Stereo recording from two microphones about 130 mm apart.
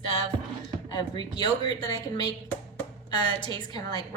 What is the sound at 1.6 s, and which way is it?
A woman's voice, 30° left (ahead or behind).